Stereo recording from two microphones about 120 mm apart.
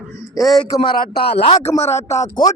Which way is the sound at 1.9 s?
25° left (ahead or behind).